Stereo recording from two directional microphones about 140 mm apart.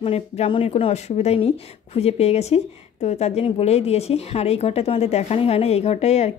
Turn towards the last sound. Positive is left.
turn(degrees=50)  # may be behind; listen again after turning